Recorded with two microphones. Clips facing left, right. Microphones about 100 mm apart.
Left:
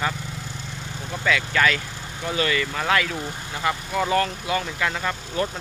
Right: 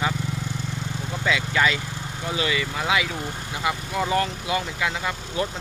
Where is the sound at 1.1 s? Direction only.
20° right (ahead or behind).